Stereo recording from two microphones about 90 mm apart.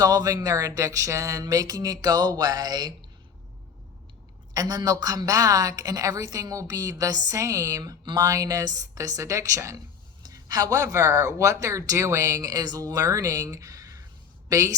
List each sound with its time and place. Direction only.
0.0 s speech: 45° right (ahead or behind)
4.5 s speech: 45° right (ahead or behind)
8.0 s speech: 50° right (ahead or behind)